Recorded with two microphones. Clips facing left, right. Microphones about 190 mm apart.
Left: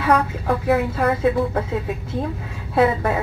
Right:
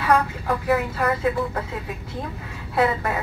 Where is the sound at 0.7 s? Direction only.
30° left (ahead or behind).